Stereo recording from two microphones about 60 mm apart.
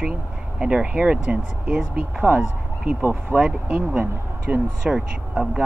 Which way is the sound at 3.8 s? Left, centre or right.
Right.